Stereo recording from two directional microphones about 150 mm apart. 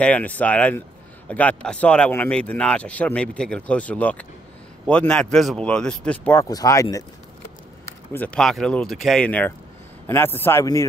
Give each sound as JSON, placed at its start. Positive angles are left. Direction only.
{"t": 0.0, "sound": "speech", "side_deg": 10}
{"t": 6.5, "sound": "speech", "side_deg": 25}
{"t": 8.1, "sound": "speech", "side_deg": 10}